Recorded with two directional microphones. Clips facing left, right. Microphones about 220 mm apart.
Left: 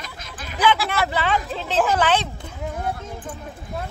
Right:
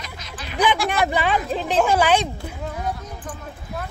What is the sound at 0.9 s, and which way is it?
Speech, 15° right (ahead or behind).